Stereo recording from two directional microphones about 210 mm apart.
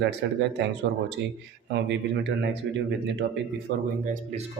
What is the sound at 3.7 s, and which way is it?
Speech, 60° right (ahead or behind).